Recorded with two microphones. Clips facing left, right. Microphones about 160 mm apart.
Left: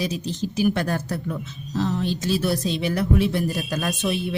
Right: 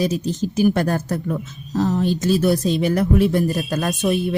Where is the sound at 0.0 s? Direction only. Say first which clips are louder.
Right 5 dB; 45° right (ahead or behind).